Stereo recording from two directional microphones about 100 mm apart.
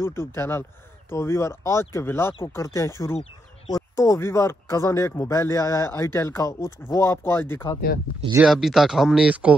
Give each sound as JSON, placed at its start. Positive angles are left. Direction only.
{"t": 0.0, "sound": "speech", "side_deg": 25}
{"t": 8.4, "sound": "speech", "side_deg": -5}